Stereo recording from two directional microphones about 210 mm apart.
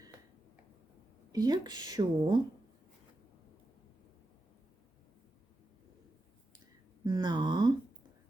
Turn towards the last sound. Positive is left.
turn(degrees=-20)  # may be behind; listen again after turning